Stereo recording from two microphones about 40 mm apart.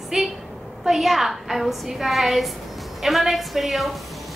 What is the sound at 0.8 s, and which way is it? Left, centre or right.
A woman's voice, centre.